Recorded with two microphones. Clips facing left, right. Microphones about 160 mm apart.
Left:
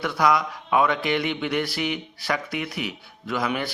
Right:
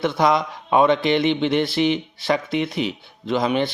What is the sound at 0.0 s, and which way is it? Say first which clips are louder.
A man's voice: right 3 dB; 25° right (ahead or behind).